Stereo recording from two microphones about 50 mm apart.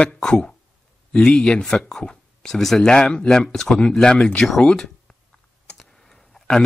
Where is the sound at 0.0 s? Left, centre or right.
Centre.